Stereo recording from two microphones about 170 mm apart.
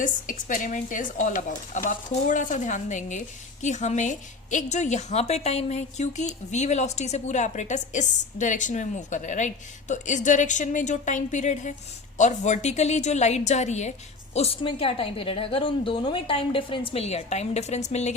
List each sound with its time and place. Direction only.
0.0 s a woman's voice: 50° left (ahead or behind)